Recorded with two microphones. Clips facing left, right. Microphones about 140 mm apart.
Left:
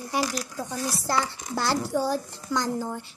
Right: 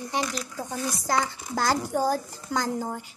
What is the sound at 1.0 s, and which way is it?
Speech, 20° right (ahead or behind).